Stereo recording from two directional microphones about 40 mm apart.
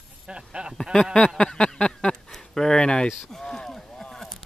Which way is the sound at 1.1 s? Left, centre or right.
Centre.